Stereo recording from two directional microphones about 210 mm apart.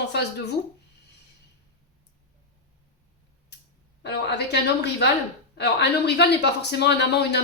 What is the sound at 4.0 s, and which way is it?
Speech, 55° left (ahead or behind).